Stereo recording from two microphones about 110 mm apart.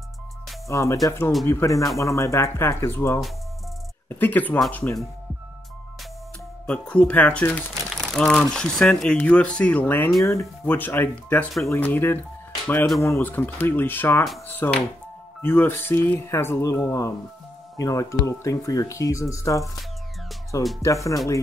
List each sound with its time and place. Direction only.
0.7 s speech: 25° left (ahead or behind)
6.6 s speech: 10° left (ahead or behind)
7.8 s speech: centre (ahead or behind); by 19.6 s 30° left (ahead or behind)
20.8 s speech: 30° left (ahead or behind)